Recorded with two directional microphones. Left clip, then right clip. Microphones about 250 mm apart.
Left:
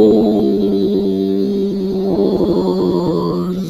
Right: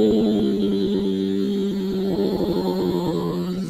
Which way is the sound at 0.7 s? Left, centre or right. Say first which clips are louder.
Left 7 dB; right.